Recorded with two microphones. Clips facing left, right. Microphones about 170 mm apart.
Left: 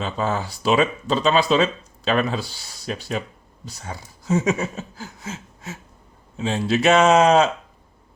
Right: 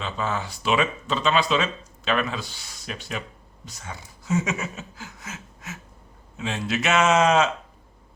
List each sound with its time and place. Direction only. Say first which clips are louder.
0.0 s speech: left 4 dB; 35° left (ahead or behind)